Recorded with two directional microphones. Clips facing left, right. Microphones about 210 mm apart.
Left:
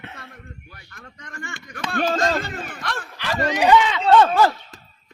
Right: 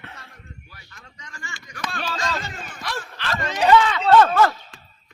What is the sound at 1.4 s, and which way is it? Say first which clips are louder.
Speech: left 2 dB; 55° left (ahead or behind).